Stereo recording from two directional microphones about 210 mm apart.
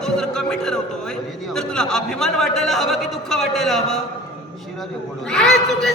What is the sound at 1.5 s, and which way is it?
A man's voice, 5° left (ahead or behind).